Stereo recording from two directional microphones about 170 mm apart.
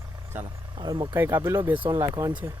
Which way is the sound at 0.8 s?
30° right (ahead or behind).